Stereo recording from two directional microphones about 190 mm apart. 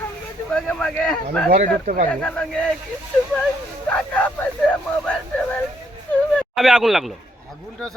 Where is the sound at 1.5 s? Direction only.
45° right (ahead or behind).